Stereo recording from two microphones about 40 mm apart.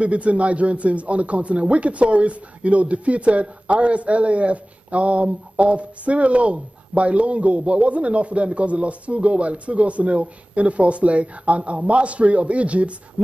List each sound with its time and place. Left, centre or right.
0.0 s a man's voice: right